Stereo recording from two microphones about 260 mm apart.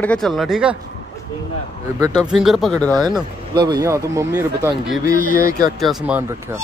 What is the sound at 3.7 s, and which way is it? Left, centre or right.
Speech, centre.